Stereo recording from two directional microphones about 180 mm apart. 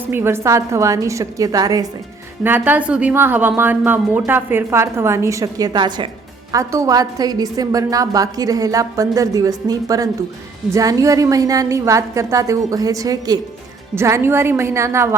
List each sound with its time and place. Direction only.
0.0 s a woman's voice: 15° right (ahead or behind)